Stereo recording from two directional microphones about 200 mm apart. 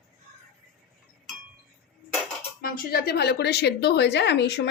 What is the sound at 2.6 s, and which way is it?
A woman's voice, 50° left (ahead or behind).